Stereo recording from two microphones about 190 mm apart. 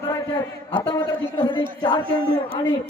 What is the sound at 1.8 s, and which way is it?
Speech, 25° left (ahead or behind).